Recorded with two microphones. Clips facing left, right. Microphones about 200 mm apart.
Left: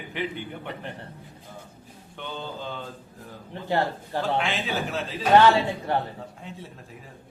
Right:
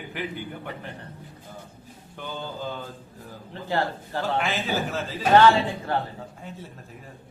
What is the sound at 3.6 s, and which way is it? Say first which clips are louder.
Speech: left 1 dB; 20° left (ahead or behind).